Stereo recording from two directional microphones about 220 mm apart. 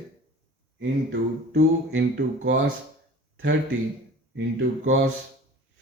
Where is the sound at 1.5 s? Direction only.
50° right (ahead or behind).